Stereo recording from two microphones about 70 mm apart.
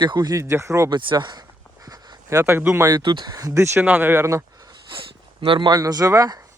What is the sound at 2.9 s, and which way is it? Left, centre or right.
Speech, right.